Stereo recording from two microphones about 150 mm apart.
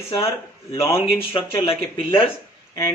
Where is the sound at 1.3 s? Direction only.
35° left (ahead or behind).